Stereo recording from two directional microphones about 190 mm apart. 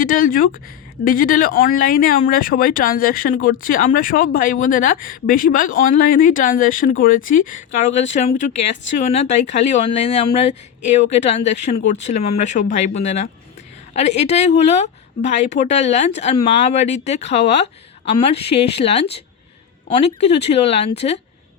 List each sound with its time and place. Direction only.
0.0 s speech: 45° left (ahead or behind)